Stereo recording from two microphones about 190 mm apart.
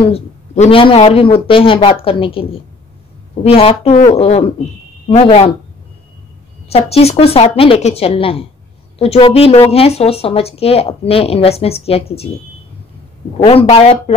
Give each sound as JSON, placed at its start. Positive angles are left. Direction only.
{"t": 0.0, "sound": "a man's voice", "side_deg": 30}
{"t": 6.7, "sound": "speech", "side_deg": 30}
{"t": 13.5, "sound": "speech", "side_deg": 30}